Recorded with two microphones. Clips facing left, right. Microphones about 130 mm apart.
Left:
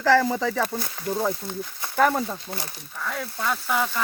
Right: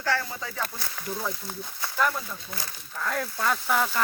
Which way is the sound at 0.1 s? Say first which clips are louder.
Left 10 dB; 90° left.